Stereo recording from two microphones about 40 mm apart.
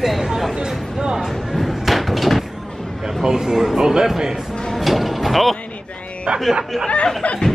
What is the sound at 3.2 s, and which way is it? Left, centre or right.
Speech, centre.